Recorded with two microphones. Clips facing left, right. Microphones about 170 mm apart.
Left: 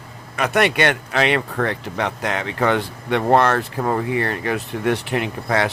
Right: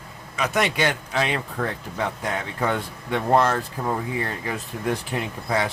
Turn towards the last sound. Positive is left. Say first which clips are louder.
# left 4 dB
turn(degrees=75)  # may be behind; listen again after turning